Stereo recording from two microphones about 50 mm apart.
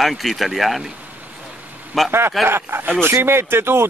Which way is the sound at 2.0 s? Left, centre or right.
Right.